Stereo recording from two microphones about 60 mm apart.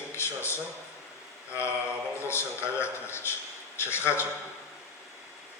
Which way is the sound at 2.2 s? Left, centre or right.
Left.